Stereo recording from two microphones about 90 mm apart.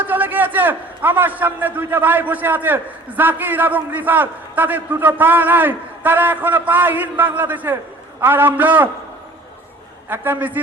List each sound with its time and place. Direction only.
0.0 s a man's voice: 20° right (ahead or behind)
10.1 s a man's voice: 20° right (ahead or behind)